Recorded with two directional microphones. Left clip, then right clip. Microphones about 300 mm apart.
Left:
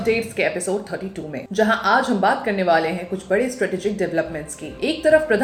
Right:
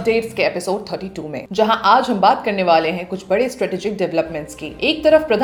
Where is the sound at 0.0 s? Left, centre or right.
Centre.